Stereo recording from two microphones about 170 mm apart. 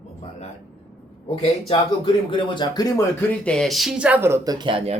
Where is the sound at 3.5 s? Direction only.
5° left (ahead or behind); by 5.0 s 35° right (ahead or behind).